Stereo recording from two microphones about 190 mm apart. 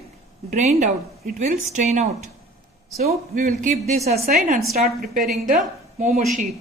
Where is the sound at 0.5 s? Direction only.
35° right (ahead or behind).